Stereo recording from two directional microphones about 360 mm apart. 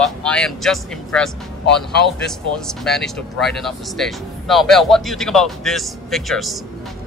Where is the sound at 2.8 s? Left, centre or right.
Centre.